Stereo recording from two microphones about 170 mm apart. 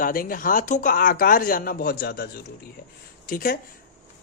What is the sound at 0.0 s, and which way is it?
Speech, 55° left (ahead or behind).